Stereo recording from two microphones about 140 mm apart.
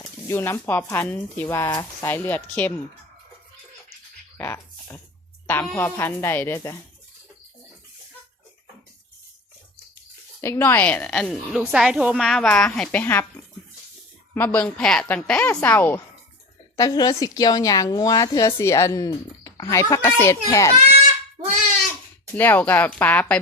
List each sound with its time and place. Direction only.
0.0 s speech: 20° left (ahead or behind)
4.4 s a sound: 20° left (ahead or behind)
5.7 s speech: 15° left (ahead or behind)
10.4 s a woman's voice: 20° left (ahead or behind); by 12.2 s 5° right (ahead or behind)
12.2 s speech: 5° left (ahead or behind)
14.3 s speech: 10° left (ahead or behind)
16.7 s a woman's voice: 25° left (ahead or behind)
22.4 s speech: 10° left (ahead or behind)